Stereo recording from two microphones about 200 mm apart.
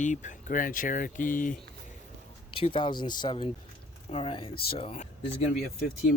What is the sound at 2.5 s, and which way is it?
Speech, 25° left (ahead or behind).